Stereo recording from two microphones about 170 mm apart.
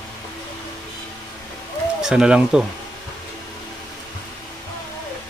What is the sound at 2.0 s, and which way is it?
Speech, 5° right (ahead or behind).